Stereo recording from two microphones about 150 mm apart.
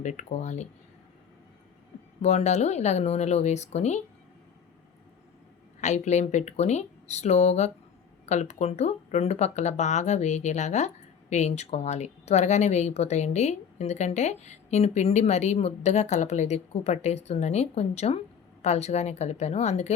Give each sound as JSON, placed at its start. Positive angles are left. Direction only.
{"t": 0.0, "sound": "speech", "side_deg": 50}
{"t": 2.2, "sound": "speech", "side_deg": 50}
{"t": 5.8, "sound": "speech", "side_deg": 50}